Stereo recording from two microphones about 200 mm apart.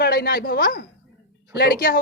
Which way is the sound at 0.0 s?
45° left (ahead or behind).